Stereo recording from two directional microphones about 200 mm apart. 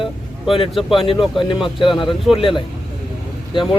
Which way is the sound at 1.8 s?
25° left (ahead or behind).